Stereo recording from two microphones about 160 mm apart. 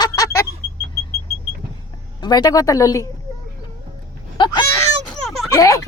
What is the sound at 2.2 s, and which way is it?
Speech, 25° left (ahead or behind).